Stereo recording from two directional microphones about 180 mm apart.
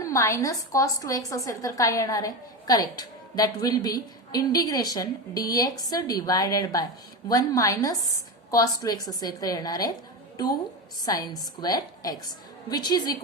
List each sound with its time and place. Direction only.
0.0 s a woman's voice: 15° left (ahead or behind)
11.0 s a woman's voice: 20° left (ahead or behind)